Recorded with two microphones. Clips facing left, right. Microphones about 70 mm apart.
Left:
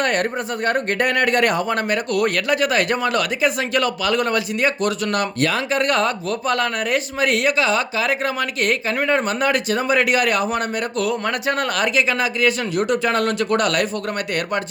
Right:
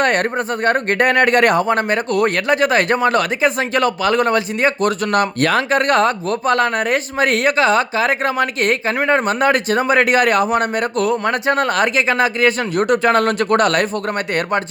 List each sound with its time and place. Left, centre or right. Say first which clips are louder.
0.0 s speech: right 4 dB; right
1.6 s a man's voice: right 4 dB; right